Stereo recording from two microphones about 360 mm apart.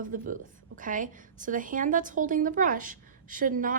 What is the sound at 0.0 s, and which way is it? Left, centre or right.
A woman's voice, right.